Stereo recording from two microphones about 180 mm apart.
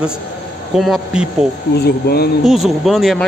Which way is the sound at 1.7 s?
60° left (ahead or behind).